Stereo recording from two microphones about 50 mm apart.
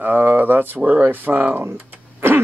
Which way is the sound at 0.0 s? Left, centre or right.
Right.